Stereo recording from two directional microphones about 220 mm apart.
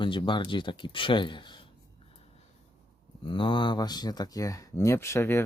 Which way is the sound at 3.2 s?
20° left (ahead or behind).